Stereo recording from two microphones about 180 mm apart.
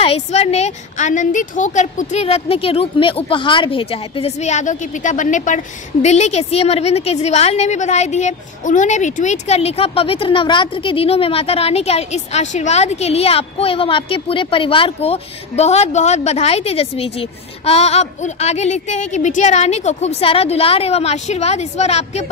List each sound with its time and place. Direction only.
0.0 s a woman's voice: 35° left (ahead or behind)